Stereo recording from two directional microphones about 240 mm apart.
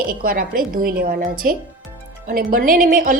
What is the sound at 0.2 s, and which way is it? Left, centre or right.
Speech, right.